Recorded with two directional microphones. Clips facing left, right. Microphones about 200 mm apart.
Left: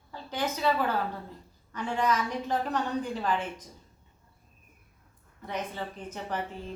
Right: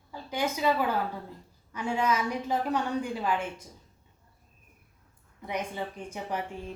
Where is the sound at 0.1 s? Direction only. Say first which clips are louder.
Right 1 dB; 10° right (ahead or behind).